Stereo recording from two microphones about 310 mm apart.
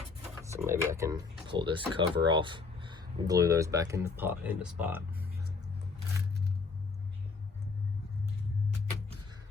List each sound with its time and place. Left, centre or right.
0.5 s speech: centre